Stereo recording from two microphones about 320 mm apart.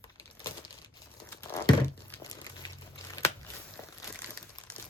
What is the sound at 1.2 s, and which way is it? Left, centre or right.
Crumpling, centre.